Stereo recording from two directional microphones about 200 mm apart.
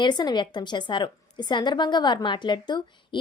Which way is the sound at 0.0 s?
20° left (ahead or behind).